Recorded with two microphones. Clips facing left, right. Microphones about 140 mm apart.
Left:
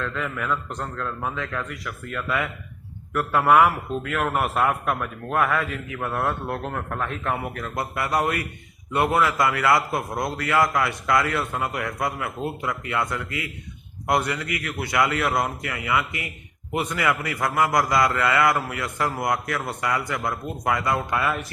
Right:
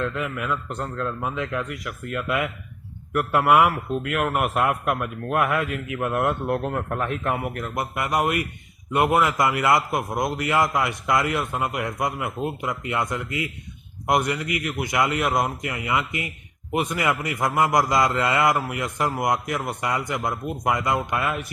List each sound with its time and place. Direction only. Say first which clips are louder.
0.2 s a man's voice: even; 10° right (ahead or behind)